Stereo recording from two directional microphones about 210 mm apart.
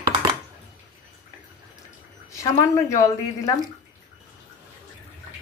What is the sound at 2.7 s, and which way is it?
Speech, 15° left (ahead or behind).